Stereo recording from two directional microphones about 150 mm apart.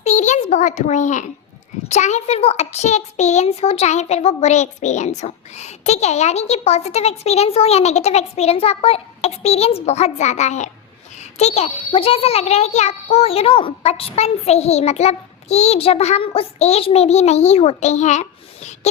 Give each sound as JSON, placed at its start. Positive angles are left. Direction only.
{"t": 0.0, "sound": "a child's voice", "side_deg": 50}